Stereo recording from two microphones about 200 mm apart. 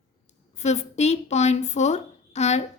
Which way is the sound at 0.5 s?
35° left (ahead or behind).